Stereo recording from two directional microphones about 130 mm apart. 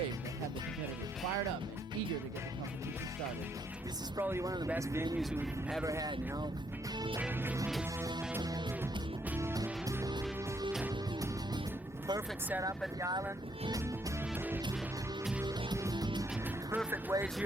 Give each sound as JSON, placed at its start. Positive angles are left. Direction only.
{"t": 4.2, "sound": "speech", "side_deg": -20}
{"t": 7.2, "sound": "speech", "side_deg": -15}
{"t": 8.4, "sound": "music", "side_deg": -30}
{"t": 10.7, "sound": "music", "side_deg": -5}
{"t": 13.0, "sound": "speech", "side_deg": -30}
{"t": 14.3, "sound": "music", "side_deg": -15}
{"t": 15.4, "sound": "music", "side_deg": -30}
{"t": 16.7, "sound": "speech", "side_deg": -15}